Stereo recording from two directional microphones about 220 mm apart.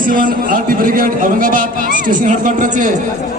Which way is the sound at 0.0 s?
40° right (ahead or behind).